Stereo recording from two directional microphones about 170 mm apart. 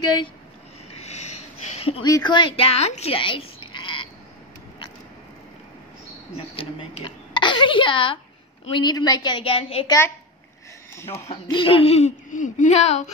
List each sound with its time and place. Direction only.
1.0 s a sound: 40° left (ahead or behind)
2.0 s speech: 25° left (ahead or behind)
6.3 s a woman's voice: 30° left (ahead or behind)
9.8 s a woman's voice: 15° left (ahead or behind); by 13.1 s 40° left (ahead or behind)